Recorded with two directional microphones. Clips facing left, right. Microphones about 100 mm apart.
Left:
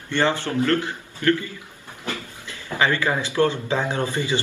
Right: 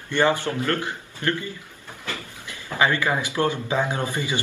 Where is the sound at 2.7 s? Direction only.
20° right (ahead or behind).